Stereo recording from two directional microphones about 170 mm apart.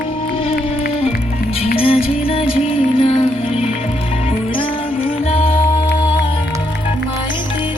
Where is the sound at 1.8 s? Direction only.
35° left (ahead or behind).